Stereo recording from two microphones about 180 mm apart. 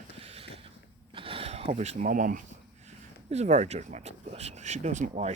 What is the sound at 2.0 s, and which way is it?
Speech, 45° right (ahead or behind).